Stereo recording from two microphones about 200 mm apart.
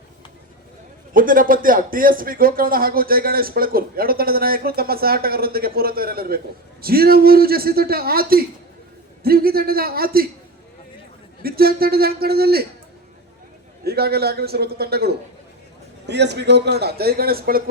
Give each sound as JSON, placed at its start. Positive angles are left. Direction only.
{"t": 1.1, "sound": "speech", "side_deg": -45}
{"t": 11.4, "sound": "speech", "side_deg": -50}
{"t": 13.8, "sound": "speech", "side_deg": -50}